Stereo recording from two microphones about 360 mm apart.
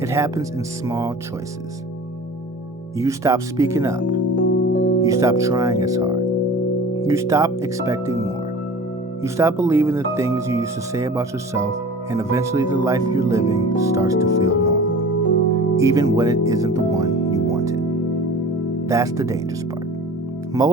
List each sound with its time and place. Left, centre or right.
0.0 s speech: centre
3.0 s speech: centre
4.4 s music: left
5.0 s speech: centre
15.8 s speech: centre
18.9 s speech: centre
20.6 s speech: centre